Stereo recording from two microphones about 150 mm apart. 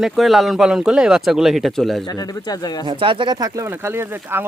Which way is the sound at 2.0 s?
25° left (ahead or behind).